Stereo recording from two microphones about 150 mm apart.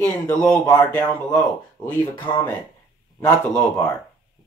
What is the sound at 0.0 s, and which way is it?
Speech, 5° left (ahead or behind).